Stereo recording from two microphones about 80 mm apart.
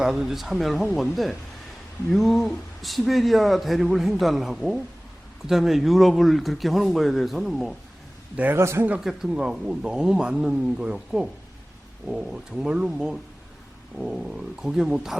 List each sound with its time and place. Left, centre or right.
0.0 s a man's voice: centre
8.5 s a man's voice: right
9.0 s a man's voice: centre